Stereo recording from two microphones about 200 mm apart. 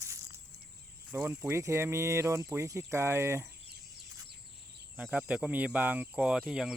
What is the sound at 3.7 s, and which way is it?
Chicken, 55° right (ahead or behind).